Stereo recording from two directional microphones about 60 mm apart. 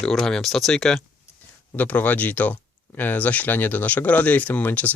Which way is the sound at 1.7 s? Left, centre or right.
Left.